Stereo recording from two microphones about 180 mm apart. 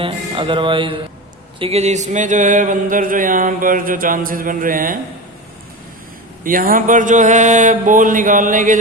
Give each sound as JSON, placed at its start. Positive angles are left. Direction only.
{"t": 0.0, "sound": "speech", "side_deg": -30}
{"t": 6.4, "sound": "speech", "side_deg": -50}